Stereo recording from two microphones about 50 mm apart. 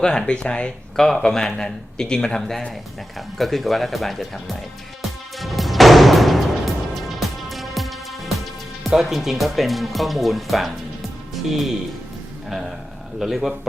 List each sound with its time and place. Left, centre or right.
0.0 s speech: centre
0.9 s speech: centre
5.4 s music: centre
8.8 s speech: centre
12.5 s a man's voice: centre